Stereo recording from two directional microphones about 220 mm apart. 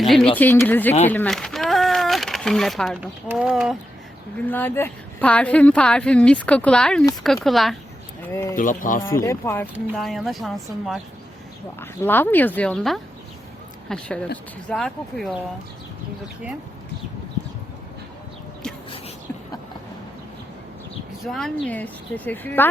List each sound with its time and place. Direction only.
0.0 s a woman's voice: centre (ahead or behind)
4.4 s a woman's voice: 10° left (ahead or behind)
8.3 s speech: 10° left (ahead or behind)
8.5 s speech: 35° left (ahead or behind)
9.2 s speech: 15° left (ahead or behind)
9.9 s a woman's voice: centre (ahead or behind)
21.2 s speech: centre (ahead or behind)